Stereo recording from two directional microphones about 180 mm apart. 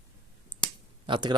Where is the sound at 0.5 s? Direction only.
25° right (ahead or behind).